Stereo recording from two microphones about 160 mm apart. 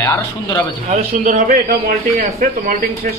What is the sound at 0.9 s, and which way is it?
A man's voice, 50° right (ahead or behind).